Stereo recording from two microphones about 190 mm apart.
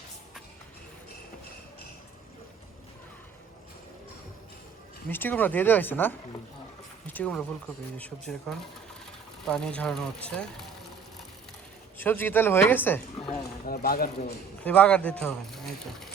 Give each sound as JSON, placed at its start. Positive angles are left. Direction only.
{"t": 5.0, "sound": "speech", "side_deg": 10}
{"t": 11.9, "sound": "speech", "side_deg": 10}
{"t": 13.7, "sound": "speech", "side_deg": 50}
{"t": 14.6, "sound": "speech", "side_deg": 10}